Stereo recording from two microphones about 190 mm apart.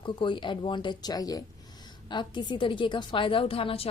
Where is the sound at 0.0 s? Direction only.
25° left (ahead or behind).